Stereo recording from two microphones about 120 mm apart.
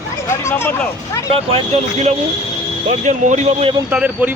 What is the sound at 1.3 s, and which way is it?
Speech, 55° right (ahead or behind).